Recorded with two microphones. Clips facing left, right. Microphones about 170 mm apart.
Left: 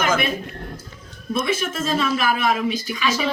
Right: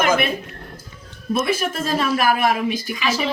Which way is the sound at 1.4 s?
55° right (ahead or behind).